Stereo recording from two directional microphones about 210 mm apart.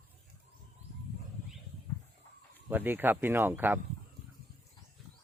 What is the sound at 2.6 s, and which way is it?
Speech, 10° right (ahead or behind).